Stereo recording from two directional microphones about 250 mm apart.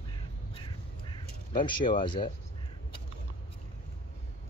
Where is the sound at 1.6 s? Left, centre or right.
Centre.